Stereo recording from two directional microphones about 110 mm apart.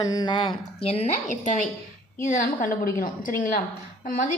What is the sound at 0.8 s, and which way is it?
Speech, 70° left (ahead or behind).